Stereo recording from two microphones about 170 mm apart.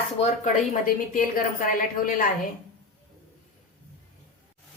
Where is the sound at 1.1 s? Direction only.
55° left (ahead or behind).